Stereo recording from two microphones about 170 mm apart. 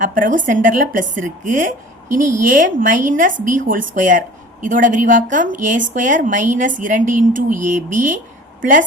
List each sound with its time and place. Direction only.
0.0 s a woman's voice: 50° right (ahead or behind)